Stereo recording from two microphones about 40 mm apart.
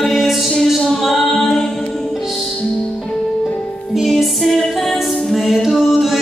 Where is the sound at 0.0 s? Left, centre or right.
Centre.